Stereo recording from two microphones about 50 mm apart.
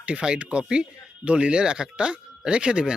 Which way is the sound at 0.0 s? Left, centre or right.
Right.